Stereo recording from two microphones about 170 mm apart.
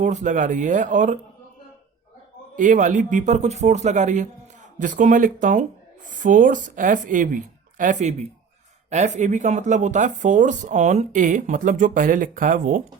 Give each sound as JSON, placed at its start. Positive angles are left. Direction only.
{"t": 0.0, "sound": "speech", "side_deg": -45}
{"t": 2.6, "sound": "speech", "side_deg": -50}